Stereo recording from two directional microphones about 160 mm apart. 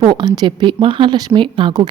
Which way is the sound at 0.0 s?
30° right (ahead or behind).